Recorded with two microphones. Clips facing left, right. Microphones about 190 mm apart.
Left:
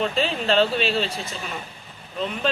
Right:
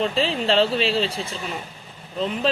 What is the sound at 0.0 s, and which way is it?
Speech, 30° right (ahead or behind).